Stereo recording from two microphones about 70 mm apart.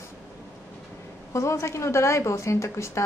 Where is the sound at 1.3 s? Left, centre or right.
Left.